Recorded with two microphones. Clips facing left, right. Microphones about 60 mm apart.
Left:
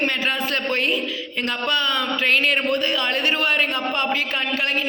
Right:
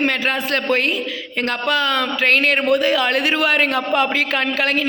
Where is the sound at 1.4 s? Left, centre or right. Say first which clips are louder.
Right 4 dB; right.